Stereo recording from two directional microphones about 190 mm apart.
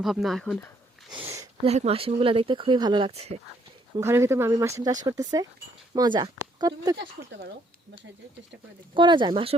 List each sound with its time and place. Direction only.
0.0 s speech: centre (ahead or behind)
1.6 s speech: 35° right (ahead or behind)
3.9 s speech: 15° right (ahead or behind)
9.0 s speech: 25° right (ahead or behind)